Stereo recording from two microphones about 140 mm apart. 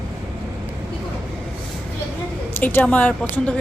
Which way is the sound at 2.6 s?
15° left (ahead or behind).